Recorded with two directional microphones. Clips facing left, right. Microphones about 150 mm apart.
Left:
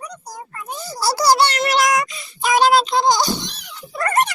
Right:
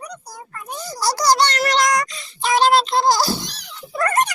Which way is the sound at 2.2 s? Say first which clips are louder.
Left 2 dB; 15° left (ahead or behind).